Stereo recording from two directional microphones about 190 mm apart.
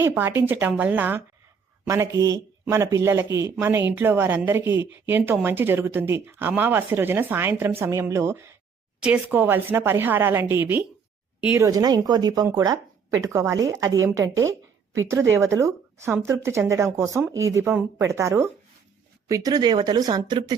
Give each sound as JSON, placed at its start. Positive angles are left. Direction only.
{"t": 0.0, "sound": "a woman's voice", "side_deg": -10}